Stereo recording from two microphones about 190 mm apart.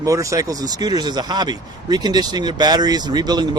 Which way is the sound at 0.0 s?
15° right (ahead or behind).